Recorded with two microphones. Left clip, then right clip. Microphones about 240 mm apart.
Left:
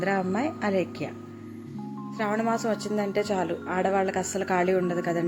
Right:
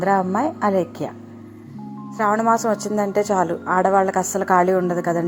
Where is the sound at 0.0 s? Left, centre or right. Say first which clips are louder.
Right 8 dB; centre.